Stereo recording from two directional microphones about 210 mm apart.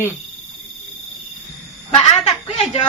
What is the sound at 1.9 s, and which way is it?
Speech, 25° left (ahead or behind).